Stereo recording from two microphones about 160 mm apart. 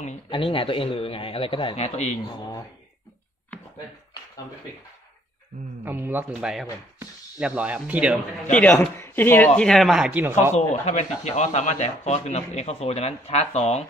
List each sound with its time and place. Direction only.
0.3 s a man's voice: 35° left (ahead or behind)
5.9 s speech: 15° right (ahead or behind)
8.5 s speech: 10° left (ahead or behind)
9.6 s speech: centre (ahead or behind)
10.5 s speech: 45° left (ahead or behind)